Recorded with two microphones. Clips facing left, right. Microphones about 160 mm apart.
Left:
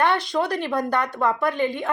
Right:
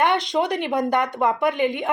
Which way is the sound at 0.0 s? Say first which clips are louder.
Right 1 dB; 15° right (ahead or behind).